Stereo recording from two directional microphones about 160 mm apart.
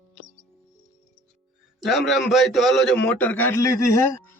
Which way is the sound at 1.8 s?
Centre (ahead or behind).